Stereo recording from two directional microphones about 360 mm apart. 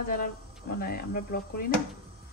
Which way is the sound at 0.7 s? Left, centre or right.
Left.